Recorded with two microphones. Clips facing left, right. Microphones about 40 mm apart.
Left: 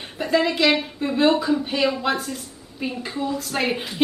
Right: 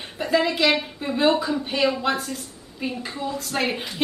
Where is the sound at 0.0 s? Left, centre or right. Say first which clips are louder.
Left 1 dB; centre.